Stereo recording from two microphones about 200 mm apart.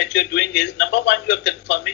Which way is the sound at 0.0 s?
60° left (ahead or behind).